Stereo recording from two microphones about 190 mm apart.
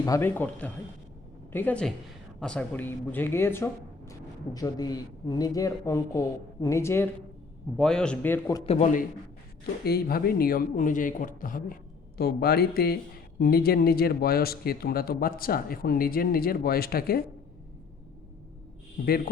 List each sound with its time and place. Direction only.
0.0 s speech: 15° left (ahead or behind)
8.6 s a man's voice: 35° left (ahead or behind)
9.8 s speech: 55° left (ahead or behind)
19.0 s speech: 50° left (ahead or behind)